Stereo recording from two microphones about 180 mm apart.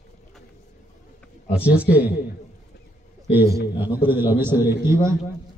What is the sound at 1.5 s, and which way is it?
Speech, 5° right (ahead or behind).